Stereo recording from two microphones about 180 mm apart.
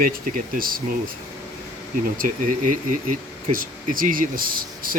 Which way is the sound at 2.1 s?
50° right (ahead or behind).